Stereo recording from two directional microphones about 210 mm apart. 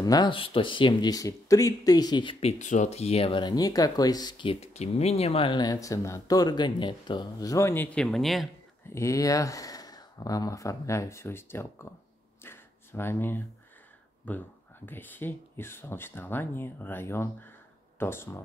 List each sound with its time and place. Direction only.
0.0 s speech: 20° left (ahead or behind)
2.6 s speech: 35° left (ahead or behind); by 8.5 s centre (ahead or behind)
8.9 s speech: 15° left (ahead or behind)
12.4 s a sound: 10° left (ahead or behind)
14.3 s speech: 5° left (ahead or behind)